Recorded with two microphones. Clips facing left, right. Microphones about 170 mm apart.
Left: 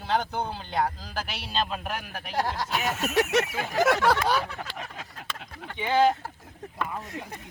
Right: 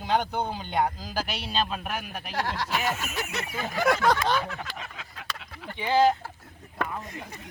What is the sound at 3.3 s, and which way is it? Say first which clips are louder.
Speech: left 8 dB; 85° left.